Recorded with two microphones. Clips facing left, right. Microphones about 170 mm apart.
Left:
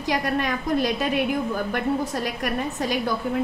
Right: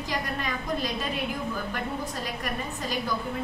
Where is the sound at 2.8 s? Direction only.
70° left (ahead or behind).